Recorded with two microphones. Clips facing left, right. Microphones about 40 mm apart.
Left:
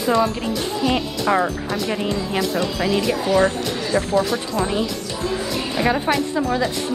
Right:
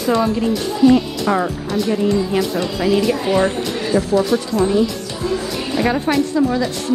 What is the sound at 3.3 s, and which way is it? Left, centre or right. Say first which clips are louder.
Speech: right 1 dB; centre.